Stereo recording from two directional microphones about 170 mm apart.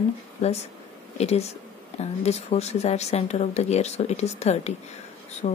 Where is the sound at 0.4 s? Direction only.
40° left (ahead or behind).